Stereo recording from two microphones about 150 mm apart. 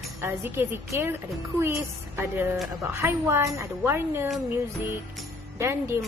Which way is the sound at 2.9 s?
15° right (ahead or behind).